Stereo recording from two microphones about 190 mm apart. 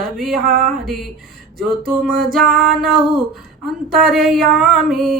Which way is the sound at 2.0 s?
55° right (ahead or behind).